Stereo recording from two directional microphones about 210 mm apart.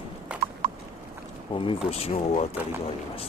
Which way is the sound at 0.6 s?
40° right (ahead or behind).